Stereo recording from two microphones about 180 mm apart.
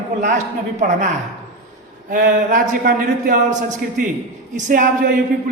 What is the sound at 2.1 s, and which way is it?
A man's voice, 50° right (ahead or behind).